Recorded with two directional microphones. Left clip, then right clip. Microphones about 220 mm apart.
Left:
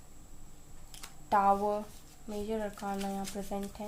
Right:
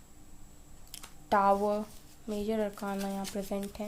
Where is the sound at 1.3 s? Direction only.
50° right (ahead or behind).